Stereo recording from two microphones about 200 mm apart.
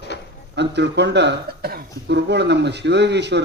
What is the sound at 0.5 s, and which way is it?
Speech, 60° right (ahead or behind).